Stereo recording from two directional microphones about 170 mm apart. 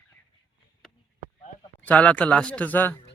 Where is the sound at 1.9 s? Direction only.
10° left (ahead or behind).